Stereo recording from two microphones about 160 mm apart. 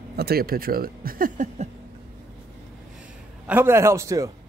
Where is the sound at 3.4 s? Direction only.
15° right (ahead or behind).